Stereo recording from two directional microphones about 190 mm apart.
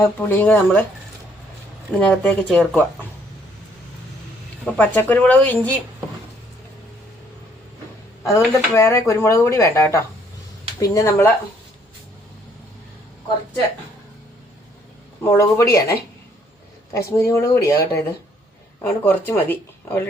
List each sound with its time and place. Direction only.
0.0 s speech: 10° left (ahead or behind)
2.0 s speech: 5° left (ahead or behind)
4.6 s speech: 10° left (ahead or behind)
8.2 s speech: 15° left (ahead or behind)
15.2 s speech: 15° left (ahead or behind)